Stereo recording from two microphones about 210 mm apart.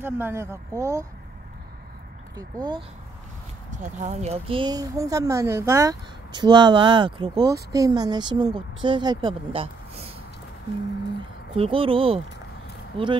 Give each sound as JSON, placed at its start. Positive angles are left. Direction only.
{"t": 0.0, "sound": "speech", "side_deg": -10}
{"t": 2.3, "sound": "speech", "side_deg": -20}
{"t": 3.7, "sound": "speech", "side_deg": -35}
{"t": 11.5, "sound": "speech", "side_deg": -25}